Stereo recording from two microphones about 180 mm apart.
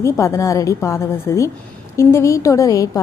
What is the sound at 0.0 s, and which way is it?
A woman's voice, 15° left (ahead or behind).